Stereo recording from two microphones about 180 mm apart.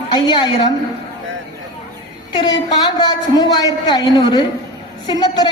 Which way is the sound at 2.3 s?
25° left (ahead or behind).